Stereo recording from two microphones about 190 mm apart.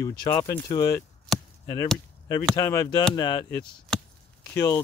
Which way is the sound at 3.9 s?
Centre (ahead or behind).